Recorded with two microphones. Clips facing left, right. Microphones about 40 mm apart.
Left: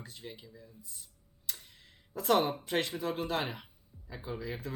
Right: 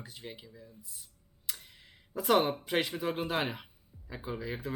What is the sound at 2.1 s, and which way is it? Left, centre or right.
Speech, centre.